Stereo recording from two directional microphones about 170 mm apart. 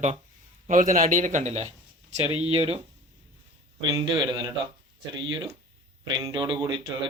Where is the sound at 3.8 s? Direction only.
25° right (ahead or behind).